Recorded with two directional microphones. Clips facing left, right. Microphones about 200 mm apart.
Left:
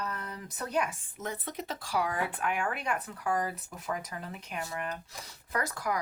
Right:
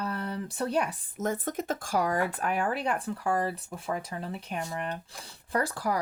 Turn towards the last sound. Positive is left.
turn(degrees=-30)  # may be behind; listen again after turning